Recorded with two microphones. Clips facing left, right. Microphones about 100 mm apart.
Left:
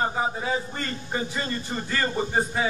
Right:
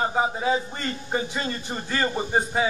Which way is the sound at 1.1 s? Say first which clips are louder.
Right 1 dB; 20° right (ahead or behind).